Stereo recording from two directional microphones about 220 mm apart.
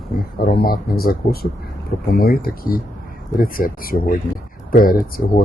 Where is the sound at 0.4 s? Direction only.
40° left (ahead or behind).